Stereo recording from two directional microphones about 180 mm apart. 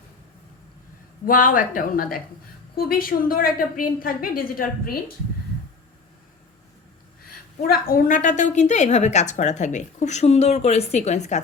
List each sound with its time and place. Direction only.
1.2 s a woman's voice: 50° left (ahead or behind)
7.3 s a woman's voice: 55° left (ahead or behind)